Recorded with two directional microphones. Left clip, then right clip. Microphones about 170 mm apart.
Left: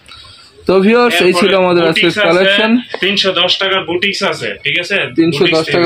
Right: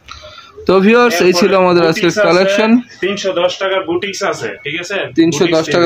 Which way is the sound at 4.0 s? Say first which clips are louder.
Left 3 dB; 75° right (ahead or behind).